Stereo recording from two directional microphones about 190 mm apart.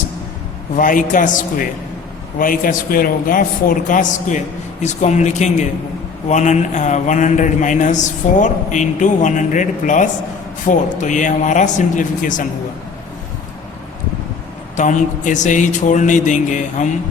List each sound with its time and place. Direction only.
0.8 s a man's voice: 45° left (ahead or behind)
14.8 s speech: 40° left (ahead or behind)